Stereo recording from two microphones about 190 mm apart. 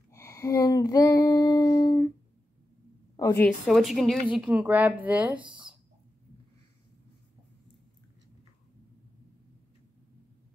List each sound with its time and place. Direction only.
0.1 s female singing: 15° left (ahead or behind)
3.2 s a woman's voice: 20° left (ahead or behind)
3.6 s a woman's voice: centre (ahead or behind)